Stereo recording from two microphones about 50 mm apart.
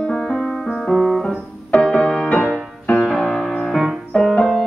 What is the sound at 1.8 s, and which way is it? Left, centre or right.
Music, centre.